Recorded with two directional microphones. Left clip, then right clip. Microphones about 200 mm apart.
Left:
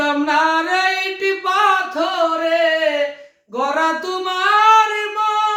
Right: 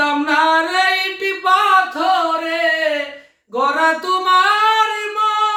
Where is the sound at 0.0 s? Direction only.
5° right (ahead or behind).